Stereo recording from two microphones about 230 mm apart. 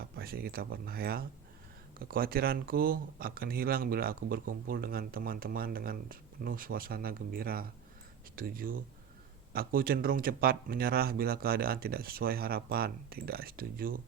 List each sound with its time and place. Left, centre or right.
0.0 s speech: right